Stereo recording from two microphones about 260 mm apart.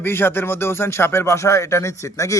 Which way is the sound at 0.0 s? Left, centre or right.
Centre.